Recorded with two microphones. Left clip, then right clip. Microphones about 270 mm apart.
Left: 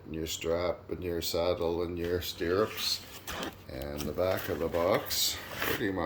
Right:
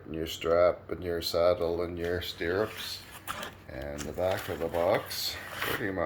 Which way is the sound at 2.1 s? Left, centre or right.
Centre.